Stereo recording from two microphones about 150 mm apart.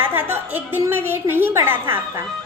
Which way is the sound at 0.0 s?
15° right (ahead or behind).